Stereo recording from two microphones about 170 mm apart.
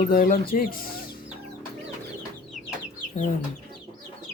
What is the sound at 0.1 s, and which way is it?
Speech, 55° left (ahead or behind).